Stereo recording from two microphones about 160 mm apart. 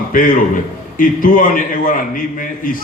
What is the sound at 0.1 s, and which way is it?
A man's voice, 60° left (ahead or behind).